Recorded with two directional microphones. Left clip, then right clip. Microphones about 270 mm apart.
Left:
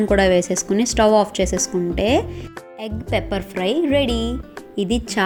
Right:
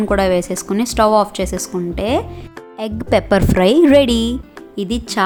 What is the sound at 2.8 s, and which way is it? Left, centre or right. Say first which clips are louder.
Speech: right 7 dB; right.